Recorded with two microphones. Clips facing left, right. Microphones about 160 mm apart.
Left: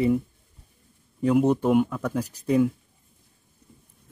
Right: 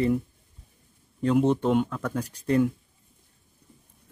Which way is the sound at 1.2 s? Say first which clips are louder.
Left 2 dB; 10° left (ahead or behind).